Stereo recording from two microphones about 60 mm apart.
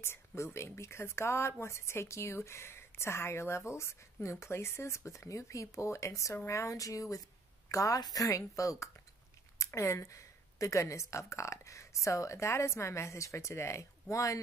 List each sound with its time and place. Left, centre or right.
0.4 s speech: left